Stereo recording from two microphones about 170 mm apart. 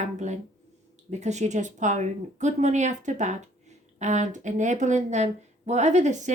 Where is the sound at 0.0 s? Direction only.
45° right (ahead or behind).